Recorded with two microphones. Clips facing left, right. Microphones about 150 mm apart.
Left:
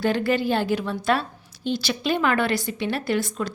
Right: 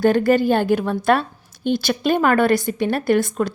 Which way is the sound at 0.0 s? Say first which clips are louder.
Right 7 dB; 45° right (ahead or behind).